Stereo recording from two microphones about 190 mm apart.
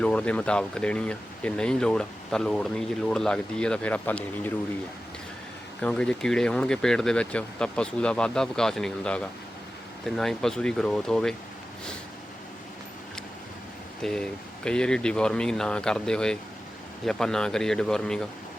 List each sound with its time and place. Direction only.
0.0 s speech: 5° left (ahead or behind)
5.8 s speech: 5° left (ahead or behind)
14.0 s speech: 5° left (ahead or behind)